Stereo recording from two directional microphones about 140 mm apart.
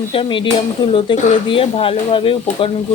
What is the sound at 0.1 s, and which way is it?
Speech, 40° left (ahead or behind).